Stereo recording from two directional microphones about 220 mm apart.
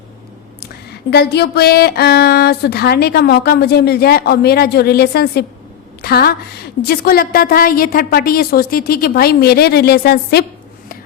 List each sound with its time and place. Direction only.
1.1 s a woman's voice: 45° left (ahead or behind)